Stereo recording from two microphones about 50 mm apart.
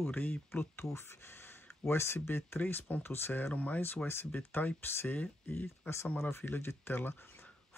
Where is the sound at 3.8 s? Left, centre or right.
Left.